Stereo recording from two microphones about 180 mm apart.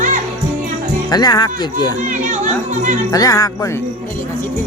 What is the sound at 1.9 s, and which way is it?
Speech, 45° right (ahead or behind).